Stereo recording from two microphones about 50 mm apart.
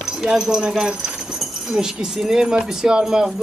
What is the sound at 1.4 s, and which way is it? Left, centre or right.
Speech, centre.